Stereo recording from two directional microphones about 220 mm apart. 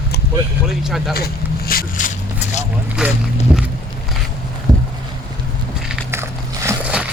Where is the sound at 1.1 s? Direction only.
45° left (ahead or behind).